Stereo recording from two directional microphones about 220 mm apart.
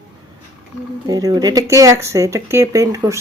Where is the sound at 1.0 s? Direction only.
15° right (ahead or behind).